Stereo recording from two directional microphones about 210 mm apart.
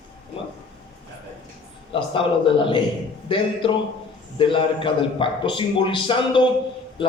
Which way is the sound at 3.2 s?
25° left (ahead or behind).